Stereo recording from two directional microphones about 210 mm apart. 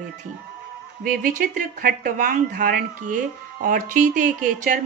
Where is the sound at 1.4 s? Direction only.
40° right (ahead or behind).